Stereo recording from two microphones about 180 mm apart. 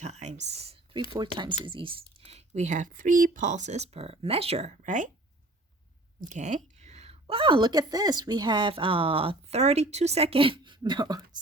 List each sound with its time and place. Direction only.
0.0 s speech: 40° right (ahead or behind)
6.1 s speech: 45° right (ahead or behind); by 11.2 s 25° right (ahead or behind)